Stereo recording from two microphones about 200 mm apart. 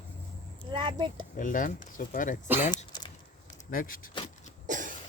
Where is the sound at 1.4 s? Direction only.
40° left (ahead or behind).